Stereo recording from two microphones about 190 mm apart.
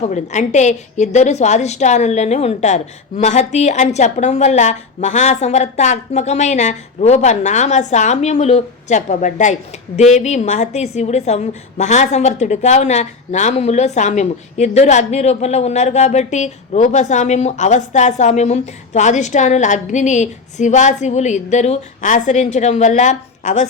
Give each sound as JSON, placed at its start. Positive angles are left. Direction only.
{"t": 0.0, "sound": "a woman's voice", "side_deg": 40}